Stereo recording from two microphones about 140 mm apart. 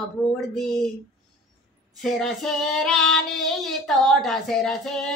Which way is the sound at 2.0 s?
Centre (ahead or behind).